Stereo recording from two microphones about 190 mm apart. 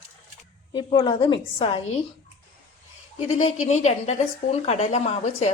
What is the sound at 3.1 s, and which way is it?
Speech, 35° left (ahead or behind).